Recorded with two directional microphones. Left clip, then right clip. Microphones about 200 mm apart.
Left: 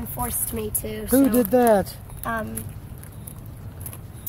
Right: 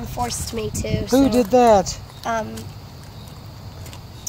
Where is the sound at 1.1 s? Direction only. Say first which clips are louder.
Right 3 dB; 15° left (ahead or behind).